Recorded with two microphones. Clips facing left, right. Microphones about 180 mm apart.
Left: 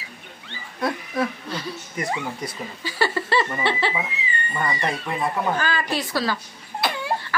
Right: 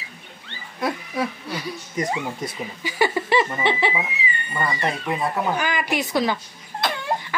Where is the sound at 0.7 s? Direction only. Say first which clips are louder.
Left 1 dB; 10° right (ahead or behind).